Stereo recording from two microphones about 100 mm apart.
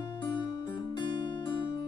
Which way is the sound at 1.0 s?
50° left (ahead or behind).